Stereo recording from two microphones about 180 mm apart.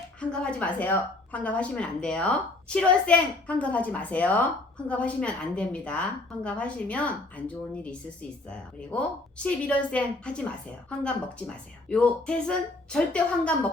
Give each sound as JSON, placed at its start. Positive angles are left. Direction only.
{"t": 0.2, "sound": "a woman's voice", "side_deg": 5}